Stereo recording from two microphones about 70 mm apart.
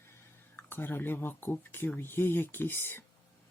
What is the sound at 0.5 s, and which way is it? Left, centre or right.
Speech, left.